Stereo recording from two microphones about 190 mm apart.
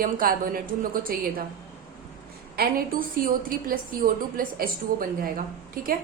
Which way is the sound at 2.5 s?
50° right (ahead or behind).